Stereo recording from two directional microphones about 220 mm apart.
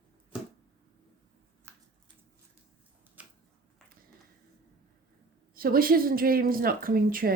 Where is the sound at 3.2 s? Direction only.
5° right (ahead or behind).